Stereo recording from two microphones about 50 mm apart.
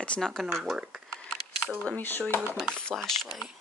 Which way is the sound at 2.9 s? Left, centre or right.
Centre.